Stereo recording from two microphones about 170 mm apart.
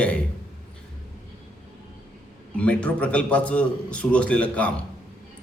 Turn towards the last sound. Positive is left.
turn(degrees=10)  # may be behind; listen again after turning